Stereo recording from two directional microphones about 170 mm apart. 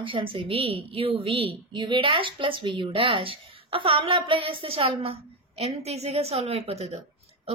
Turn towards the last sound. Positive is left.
turn(degrees=-40)  # may be behind; listen again after turning